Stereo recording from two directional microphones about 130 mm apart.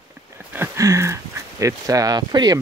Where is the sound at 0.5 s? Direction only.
20° right (ahead or behind).